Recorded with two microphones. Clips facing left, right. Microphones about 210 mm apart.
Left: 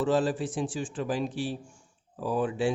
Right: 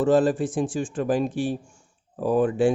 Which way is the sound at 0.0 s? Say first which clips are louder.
Right 6 dB; 50° right (ahead or behind).